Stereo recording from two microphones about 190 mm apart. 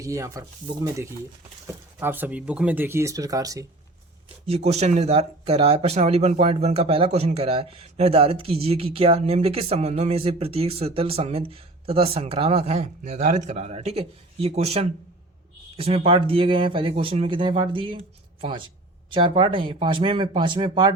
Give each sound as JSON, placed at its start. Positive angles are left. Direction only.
{"t": 0.0, "sound": "speech", "side_deg": -15}
{"t": 2.0, "sound": "speech", "side_deg": -10}
{"t": 4.4, "sound": "speech", "side_deg": -35}